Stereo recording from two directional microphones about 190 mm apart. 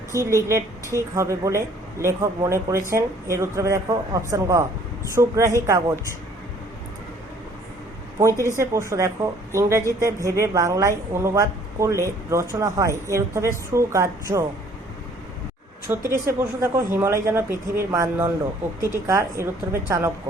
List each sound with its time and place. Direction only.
0.1 s a woman's voice: 15° right (ahead or behind)
8.2 s a woman's voice: 15° right (ahead or behind)
15.9 s a woman's voice: 15° right (ahead or behind)